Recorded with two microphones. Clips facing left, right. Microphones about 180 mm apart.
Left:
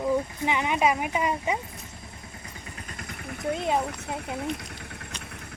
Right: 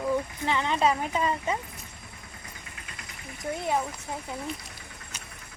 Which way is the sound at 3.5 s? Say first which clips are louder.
Left 2 dB; 20° left (ahead or behind).